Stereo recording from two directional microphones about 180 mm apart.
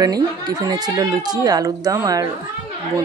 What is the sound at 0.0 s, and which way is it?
Speech, 20° right (ahead or behind).